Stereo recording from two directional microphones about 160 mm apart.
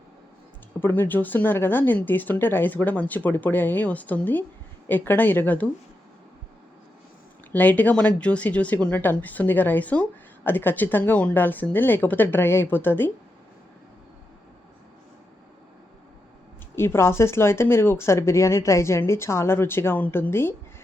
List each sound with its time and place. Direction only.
0.8 s speech: 10° left (ahead or behind)
7.5 s speech: 10° left (ahead or behind)
16.7 s speech: 15° left (ahead or behind)